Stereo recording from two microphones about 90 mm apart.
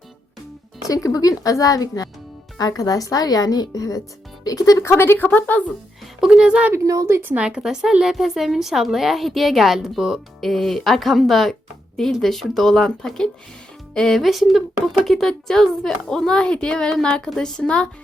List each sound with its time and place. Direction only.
0.9 s a woman's voice: 40° left (ahead or behind)
4.9 s a woman's voice: 25° left (ahead or behind)
6.1 s speech: 5° right (ahead or behind)
6.7 s a woman's voice: 35° right (ahead or behind)
7.2 s a woman's voice: 20° right (ahead or behind)
7.4 s a woman's voice: 5° right (ahead or behind); by 17.8 s 10° left (ahead or behind)